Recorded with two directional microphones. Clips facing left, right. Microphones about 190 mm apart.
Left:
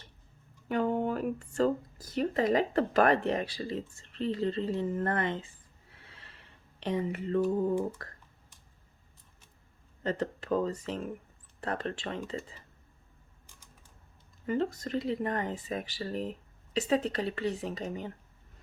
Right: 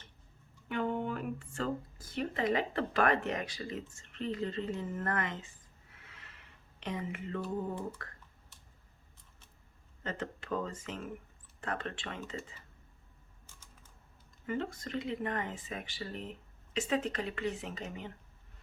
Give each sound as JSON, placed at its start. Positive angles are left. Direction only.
{"t": 0.7, "sound": "speech", "side_deg": 40}
{"t": 5.9, "sound": "a sound", "side_deg": 30}
{"t": 8.0, "sound": "computer keyboard", "side_deg": 35}
{"t": 10.0, "sound": "speech", "side_deg": 35}
{"t": 14.4, "sound": "speech", "side_deg": 35}